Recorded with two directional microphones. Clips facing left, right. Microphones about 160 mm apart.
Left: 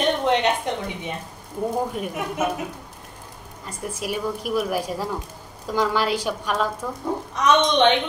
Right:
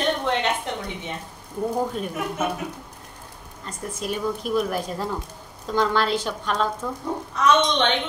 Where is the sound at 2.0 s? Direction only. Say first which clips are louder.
Even; 10° left (ahead or behind).